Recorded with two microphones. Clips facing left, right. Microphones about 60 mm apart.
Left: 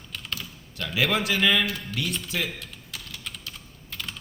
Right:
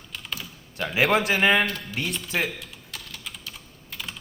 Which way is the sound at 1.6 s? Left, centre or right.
Centre.